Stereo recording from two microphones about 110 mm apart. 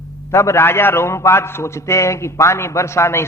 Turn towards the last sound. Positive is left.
turn(degrees=25)  # may be behind; listen again after turning